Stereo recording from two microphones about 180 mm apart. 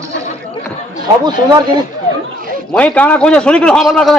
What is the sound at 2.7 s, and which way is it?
A man's voice, 5° left (ahead or behind).